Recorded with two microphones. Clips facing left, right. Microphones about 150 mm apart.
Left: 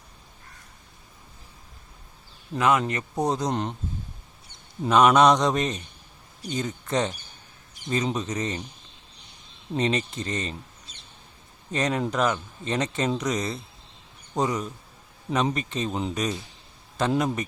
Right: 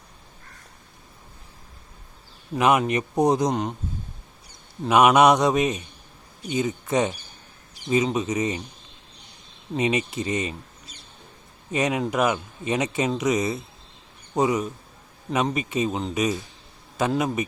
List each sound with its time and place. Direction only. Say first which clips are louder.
2.6 s speech: right 3 dB; 20° right (ahead or behind)
3.5 s speech: right 2 dB; 5° right (ahead or behind)
4.9 s speech: right 1 dB; 10° right (ahead or behind)
9.7 s speech: right 2 dB; 10° right (ahead or behind)
11.7 s speech: right 2 dB; 10° right (ahead or behind)